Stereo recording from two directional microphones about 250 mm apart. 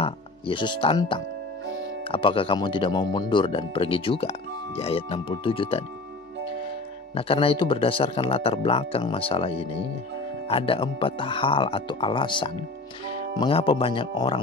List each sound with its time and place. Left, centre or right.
0.0 s speech: centre
7.2 s speech: left